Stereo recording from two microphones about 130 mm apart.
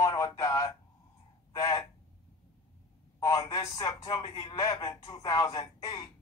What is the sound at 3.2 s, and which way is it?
Speech, 30° left (ahead or behind).